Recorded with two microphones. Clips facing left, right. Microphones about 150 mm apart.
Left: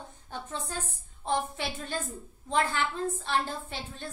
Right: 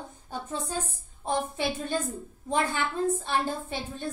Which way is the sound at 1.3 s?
15° right (ahead or behind).